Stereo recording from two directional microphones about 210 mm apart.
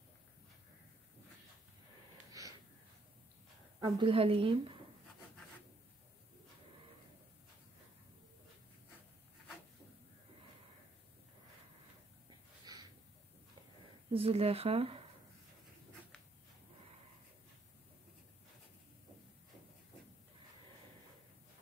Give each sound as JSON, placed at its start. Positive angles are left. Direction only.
{"t": 2.4, "sound": "gasp", "side_deg": -15}
{"t": 3.8, "sound": "speech", "side_deg": -25}
{"t": 12.7, "sound": "a sound", "side_deg": -20}
{"t": 14.1, "sound": "speech", "side_deg": -25}